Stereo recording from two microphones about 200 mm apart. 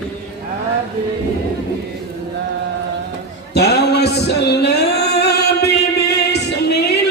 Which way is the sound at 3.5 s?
55° left (ahead or behind).